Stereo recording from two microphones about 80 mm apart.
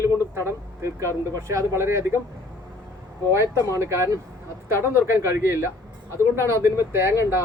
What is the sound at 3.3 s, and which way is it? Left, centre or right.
Speech, right.